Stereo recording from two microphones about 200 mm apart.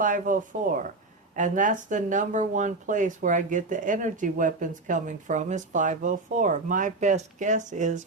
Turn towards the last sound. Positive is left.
turn(degrees=-40)  # may be behind; listen again after turning